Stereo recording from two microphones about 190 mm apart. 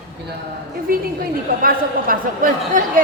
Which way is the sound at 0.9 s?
50° right (ahead or behind).